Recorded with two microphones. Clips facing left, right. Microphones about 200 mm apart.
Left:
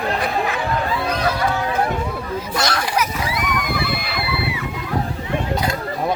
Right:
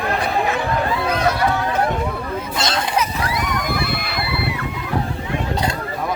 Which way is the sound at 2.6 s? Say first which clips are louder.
Right 1 dB; 25° right (ahead or behind).